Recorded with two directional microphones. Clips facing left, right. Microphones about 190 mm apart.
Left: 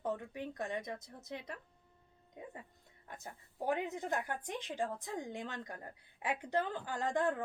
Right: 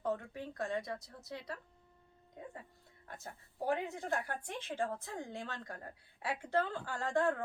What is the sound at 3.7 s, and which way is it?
Speech, 20° left (ahead or behind).